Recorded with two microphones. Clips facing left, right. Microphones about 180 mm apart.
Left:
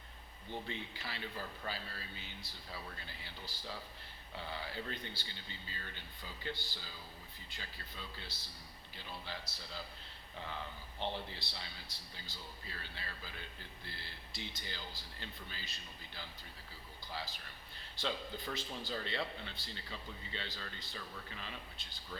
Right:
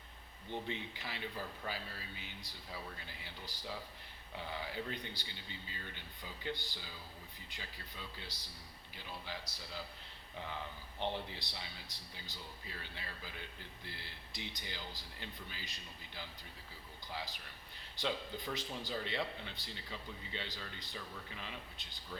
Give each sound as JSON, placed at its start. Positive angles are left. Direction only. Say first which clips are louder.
{"t": 0.5, "sound": "speech", "louder": "right 2 dB", "side_deg": -20}
{"t": 11.0, "sound": "speech", "louder": "right 1 dB", "side_deg": -15}